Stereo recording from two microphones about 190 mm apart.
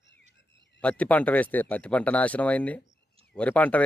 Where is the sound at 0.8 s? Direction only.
5° left (ahead or behind).